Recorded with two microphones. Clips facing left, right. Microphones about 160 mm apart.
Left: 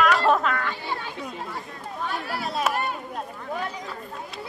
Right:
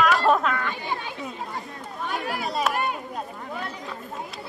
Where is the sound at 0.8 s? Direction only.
15° right (ahead or behind).